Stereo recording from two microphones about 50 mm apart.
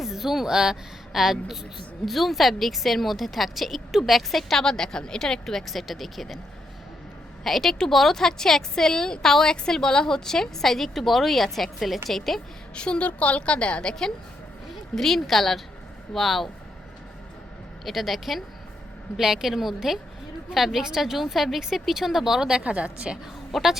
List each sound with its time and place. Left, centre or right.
0.0 s a woman's voice: centre
7.4 s a woman's voice: centre
12.7 s a woman's voice: left
14.9 s speech: centre
17.8 s a woman's voice: centre; by 23.1 s right
23.5 s a woman's voice: centre